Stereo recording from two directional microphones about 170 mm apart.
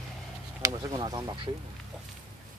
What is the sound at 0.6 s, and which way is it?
Speech, 20° right (ahead or behind).